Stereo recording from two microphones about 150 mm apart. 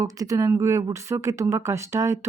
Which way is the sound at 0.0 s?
20° right (ahead or behind).